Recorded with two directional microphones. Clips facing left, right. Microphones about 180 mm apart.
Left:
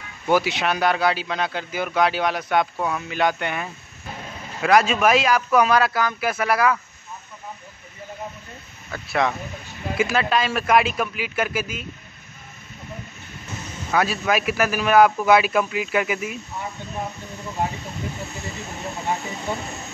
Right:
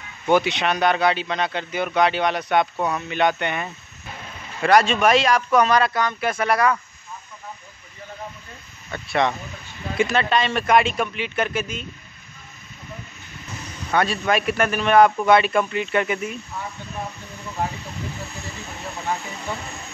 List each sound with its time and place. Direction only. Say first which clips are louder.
0.3 s a man's voice: right 1 dB; 5° left (ahead or behind)
8.9 s a man's voice: right 1 dB; centre (ahead or behind)
13.9 s a man's voice: right 1 dB; 5° left (ahead or behind)
19.0 s speech: left 1 dB; 20° left (ahead or behind)